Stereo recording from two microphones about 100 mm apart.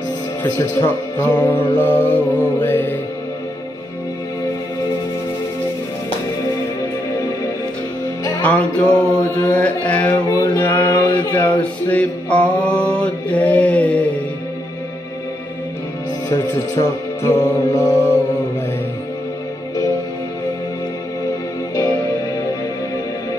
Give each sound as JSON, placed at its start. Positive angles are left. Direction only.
{"t": 0.6, "sound": "music", "side_deg": 25}
{"t": 8.4, "sound": "music", "side_deg": 15}
{"t": 10.3, "sound": "a sound", "side_deg": 45}
{"t": 10.6, "sound": "mantra", "side_deg": 15}
{"t": 11.3, "sound": "male singing", "side_deg": 15}
{"t": 16.3, "sound": "speech", "side_deg": 30}